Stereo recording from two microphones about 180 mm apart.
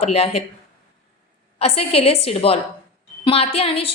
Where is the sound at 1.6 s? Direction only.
35° left (ahead or behind).